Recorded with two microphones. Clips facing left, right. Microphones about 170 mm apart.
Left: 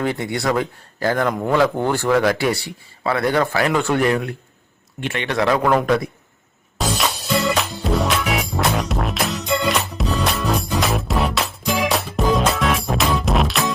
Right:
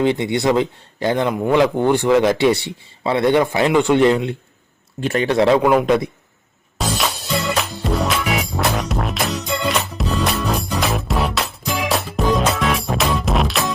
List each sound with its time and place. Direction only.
0.0 s speech: 20° right (ahead or behind)
1.3 s speech: 10° right (ahead or behind)
4.9 s speech: 35° right (ahead or behind)
6.7 s music: centre (ahead or behind)